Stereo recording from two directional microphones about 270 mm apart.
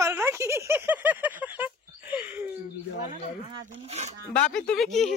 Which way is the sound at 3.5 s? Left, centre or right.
Right.